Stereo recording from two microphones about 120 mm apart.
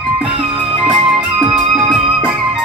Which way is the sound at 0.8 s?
5° right (ahead or behind).